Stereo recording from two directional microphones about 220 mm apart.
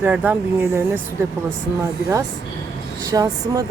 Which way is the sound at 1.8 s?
15° right (ahead or behind).